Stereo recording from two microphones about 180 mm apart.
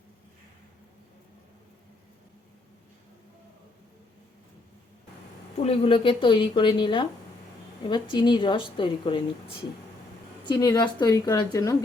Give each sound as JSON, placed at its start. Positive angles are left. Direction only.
{"t": 5.6, "sound": "a woman's voice", "side_deg": 30}
{"t": 8.1, "sound": "a woman's voice", "side_deg": 25}
{"t": 10.4, "sound": "a woman's voice", "side_deg": 25}